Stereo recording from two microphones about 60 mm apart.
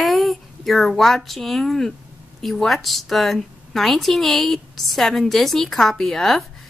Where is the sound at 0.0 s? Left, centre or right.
Centre.